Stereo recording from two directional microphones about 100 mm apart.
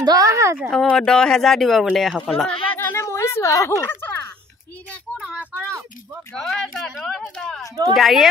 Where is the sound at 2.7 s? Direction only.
20° left (ahead or behind).